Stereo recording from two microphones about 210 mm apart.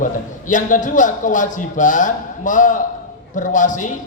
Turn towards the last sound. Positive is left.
turn(degrees=35)  # may be behind; listen again after turning